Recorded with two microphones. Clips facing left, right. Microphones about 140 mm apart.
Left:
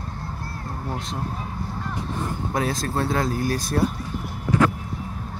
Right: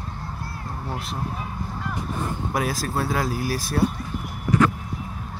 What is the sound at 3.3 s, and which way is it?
Speech, 5° right (ahead or behind).